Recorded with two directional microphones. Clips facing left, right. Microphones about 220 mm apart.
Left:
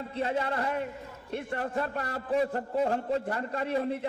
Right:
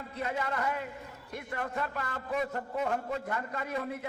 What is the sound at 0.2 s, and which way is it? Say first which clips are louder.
A man's voice: left 4 dB; 30° left (ahead or behind).